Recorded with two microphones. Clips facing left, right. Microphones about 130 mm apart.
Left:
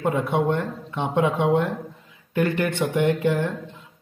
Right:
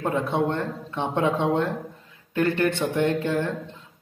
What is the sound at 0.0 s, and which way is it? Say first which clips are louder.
Speech: left 2 dB; 15° left (ahead or behind).